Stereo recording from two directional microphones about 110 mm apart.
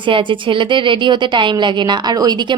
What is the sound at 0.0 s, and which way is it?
A woman's voice, 50° right (ahead or behind).